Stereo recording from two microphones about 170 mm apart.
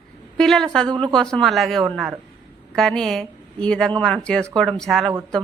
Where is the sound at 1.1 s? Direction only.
5° left (ahead or behind).